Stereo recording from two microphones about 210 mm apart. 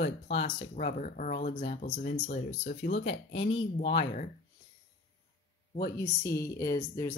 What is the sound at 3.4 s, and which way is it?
Speech, 25° left (ahead or behind).